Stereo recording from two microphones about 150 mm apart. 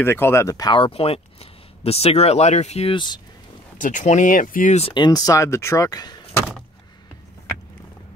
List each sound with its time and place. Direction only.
0.0 s speech: 15° left (ahead or behind); by 3.2 s 35° left (ahead or behind)
3.7 s speech: 60° left (ahead or behind)
4.7 s speech: 35° left (ahead or behind)